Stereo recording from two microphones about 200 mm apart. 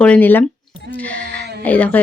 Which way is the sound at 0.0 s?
10° left (ahead or behind).